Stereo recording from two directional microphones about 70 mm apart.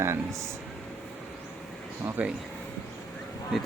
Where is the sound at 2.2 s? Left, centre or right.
Right.